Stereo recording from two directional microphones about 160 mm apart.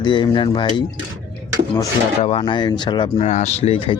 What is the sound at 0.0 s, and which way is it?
Speech, 30° left (ahead or behind).